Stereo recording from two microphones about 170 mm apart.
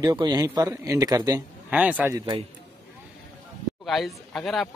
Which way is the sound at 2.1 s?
25° right (ahead or behind).